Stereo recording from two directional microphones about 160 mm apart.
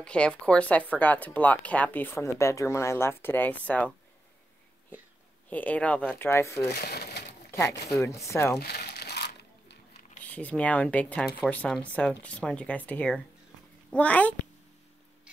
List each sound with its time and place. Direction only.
0.0 s speech: 5° left (ahead or behind)
5.5 s speech: 10° left (ahead or behind)
6.7 s crumpling: 85° left
8.0 s speech: 20° left (ahead or behind)
8.5 s crumpling: 85° left
10.2 s speech: 10° left (ahead or behind)